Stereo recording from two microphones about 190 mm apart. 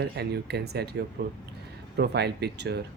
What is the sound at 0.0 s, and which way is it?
Speech, 60° right (ahead or behind).